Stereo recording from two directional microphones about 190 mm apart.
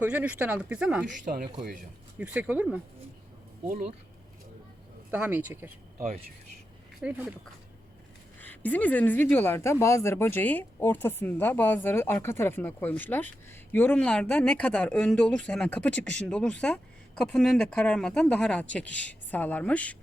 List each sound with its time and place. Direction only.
0.0 s speech: 10° right (ahead or behind)
1.3 s speech: 45° right (ahead or behind)
2.1 s speech: 10° right (ahead or behind)
3.7 s speech: 40° right (ahead or behind)
5.1 s speech: 10° right (ahead or behind)
7.0 s speech: 10° right (ahead or behind)
8.4 s speech: 10° left (ahead or behind)